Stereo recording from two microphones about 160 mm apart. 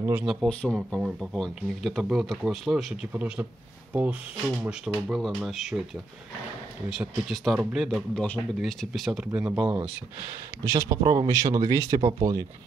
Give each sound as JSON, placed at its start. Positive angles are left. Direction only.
{"t": 0.0, "sound": "speech", "side_deg": -5}
{"t": 5.1, "sound": "speech", "side_deg": 0}
{"t": 6.9, "sound": "speech", "side_deg": -5}